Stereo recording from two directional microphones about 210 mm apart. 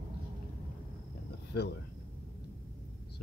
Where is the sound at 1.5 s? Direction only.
50° left (ahead or behind).